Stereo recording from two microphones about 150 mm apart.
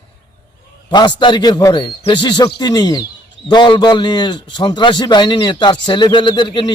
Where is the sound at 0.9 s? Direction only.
30° left (ahead or behind).